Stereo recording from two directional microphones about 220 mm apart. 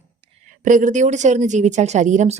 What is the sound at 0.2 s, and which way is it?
Speech, 35° right (ahead or behind).